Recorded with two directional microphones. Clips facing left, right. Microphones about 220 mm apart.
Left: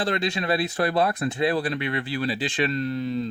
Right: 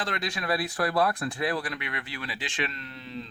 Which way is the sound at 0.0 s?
30° left (ahead or behind).